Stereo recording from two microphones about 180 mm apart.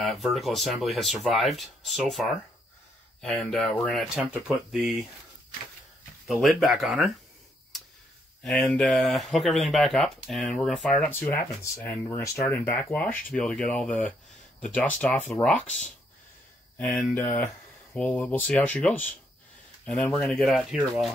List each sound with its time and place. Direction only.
0.0 s speech: centre (ahead or behind)
6.2 s speech: centre (ahead or behind)
8.5 s speech: 5° left (ahead or behind)
16.7 s speech: 5° left (ahead or behind)